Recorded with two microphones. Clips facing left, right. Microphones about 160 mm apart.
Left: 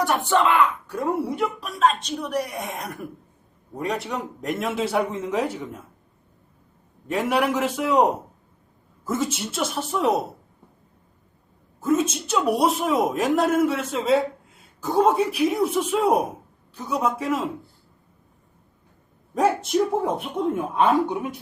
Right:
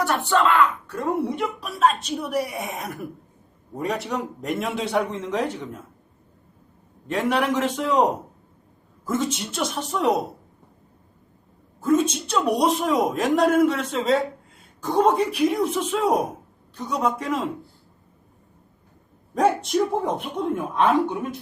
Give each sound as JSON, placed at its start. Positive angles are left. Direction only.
{"t": 0.0, "sound": "speech", "side_deg": 20}
{"t": 0.9, "sound": "a man's voice", "side_deg": 0}
{"t": 7.1, "sound": "a man's voice", "side_deg": 5}
{"t": 11.8, "sound": "a man's voice", "side_deg": 0}
{"t": 19.3, "sound": "a man's voice", "side_deg": 0}